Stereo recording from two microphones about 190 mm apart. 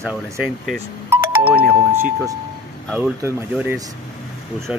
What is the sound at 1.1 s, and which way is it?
Music, 10° right (ahead or behind).